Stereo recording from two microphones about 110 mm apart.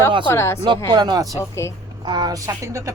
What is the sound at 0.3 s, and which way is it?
Speech, 20° left (ahead or behind).